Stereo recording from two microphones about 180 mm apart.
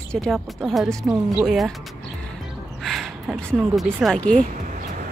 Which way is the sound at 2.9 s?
Centre (ahead or behind).